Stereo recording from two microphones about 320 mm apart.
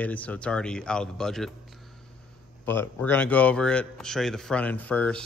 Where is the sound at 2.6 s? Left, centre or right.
Centre.